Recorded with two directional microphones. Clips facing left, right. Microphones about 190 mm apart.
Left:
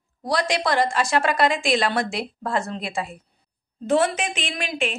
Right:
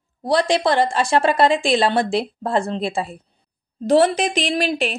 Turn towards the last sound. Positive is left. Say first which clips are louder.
# right 6 dB
turn(degrees=-35)  # may be behind; listen again after turning